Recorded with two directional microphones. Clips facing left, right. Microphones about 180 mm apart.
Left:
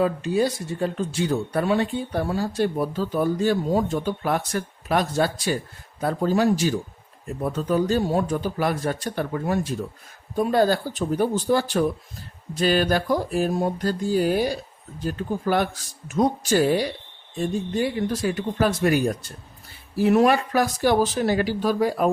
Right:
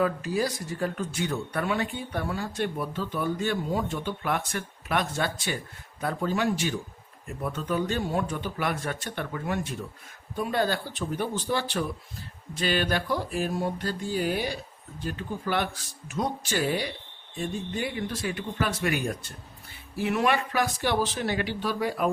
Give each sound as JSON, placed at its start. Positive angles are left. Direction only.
{"t": 0.0, "sound": "speech", "side_deg": 25}